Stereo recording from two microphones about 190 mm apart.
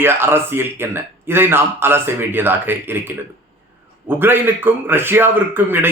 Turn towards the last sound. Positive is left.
turn(degrees=-10)  # may be behind; listen again after turning